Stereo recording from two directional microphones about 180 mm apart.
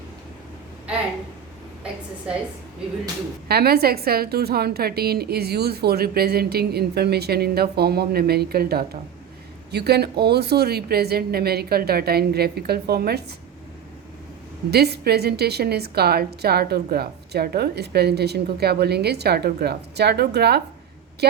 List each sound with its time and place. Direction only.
3.5 s a woman's voice: 60° right (ahead or behind)
14.7 s a woman's voice: 65° right (ahead or behind)